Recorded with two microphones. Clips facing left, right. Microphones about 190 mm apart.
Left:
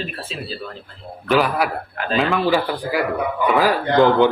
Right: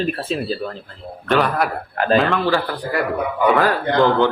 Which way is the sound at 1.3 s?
5° left (ahead or behind).